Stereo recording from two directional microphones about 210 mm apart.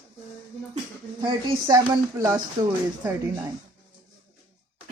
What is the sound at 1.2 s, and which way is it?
Speech, 20° right (ahead or behind).